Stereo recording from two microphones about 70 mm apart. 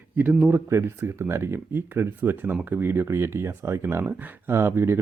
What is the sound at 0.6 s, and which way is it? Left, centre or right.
Speech, right.